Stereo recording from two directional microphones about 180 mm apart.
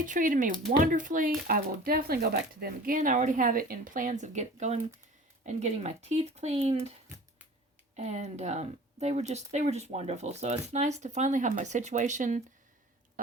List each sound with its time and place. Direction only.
0.0 s speech: 45° right (ahead or behind)
7.9 s speech: 40° right (ahead or behind)
13.2 s a sound: 50° right (ahead or behind)